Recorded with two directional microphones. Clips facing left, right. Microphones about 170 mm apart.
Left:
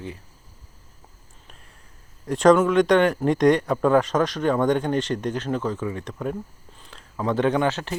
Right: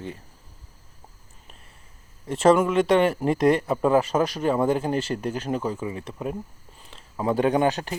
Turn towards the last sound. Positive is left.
turn(degrees=-15)  # may be behind; listen again after turning